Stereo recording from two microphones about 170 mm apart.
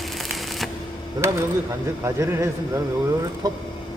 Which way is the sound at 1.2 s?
15° right (ahead or behind).